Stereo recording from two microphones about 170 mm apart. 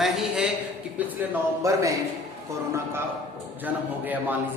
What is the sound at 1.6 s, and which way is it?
Speech, 20° right (ahead or behind).